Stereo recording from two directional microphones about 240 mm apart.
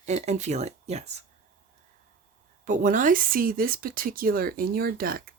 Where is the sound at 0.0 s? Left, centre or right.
Right.